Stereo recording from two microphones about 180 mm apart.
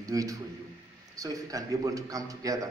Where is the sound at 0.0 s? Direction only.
20° right (ahead or behind).